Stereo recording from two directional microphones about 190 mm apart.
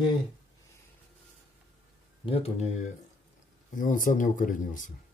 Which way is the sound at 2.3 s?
35° left (ahead or behind).